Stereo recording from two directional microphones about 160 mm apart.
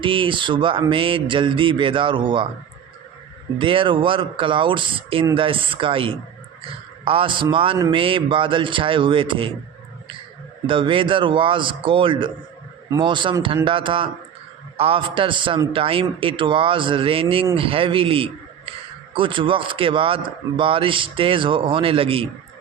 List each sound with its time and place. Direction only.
0.0 s a man's voice: 30° right (ahead or behind)
3.6 s a man's voice: 30° right (ahead or behind)
10.7 s a man's voice: 30° right (ahead or behind)